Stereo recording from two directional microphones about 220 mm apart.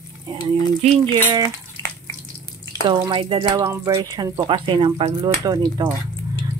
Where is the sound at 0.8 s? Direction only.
30° right (ahead or behind).